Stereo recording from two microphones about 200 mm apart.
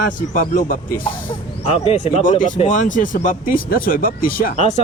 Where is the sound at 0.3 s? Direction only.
45° left (ahead or behind).